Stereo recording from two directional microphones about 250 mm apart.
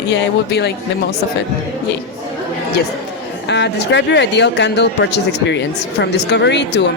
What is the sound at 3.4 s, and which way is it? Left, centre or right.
Speech, left.